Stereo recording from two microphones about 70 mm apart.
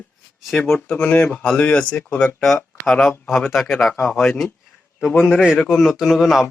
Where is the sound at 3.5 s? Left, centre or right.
Centre.